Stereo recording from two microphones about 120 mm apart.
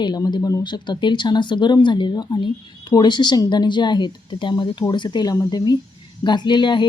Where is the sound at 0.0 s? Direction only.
35° left (ahead or behind).